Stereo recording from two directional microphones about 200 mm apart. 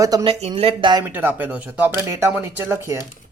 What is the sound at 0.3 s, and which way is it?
Speech, 30° right (ahead or behind).